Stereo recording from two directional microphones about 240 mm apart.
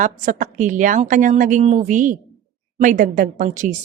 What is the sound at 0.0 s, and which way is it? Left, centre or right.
Speech, right.